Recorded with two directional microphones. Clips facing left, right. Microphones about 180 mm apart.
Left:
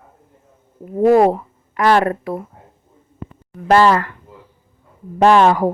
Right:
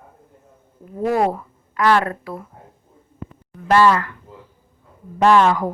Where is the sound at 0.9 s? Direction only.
40° left (ahead or behind).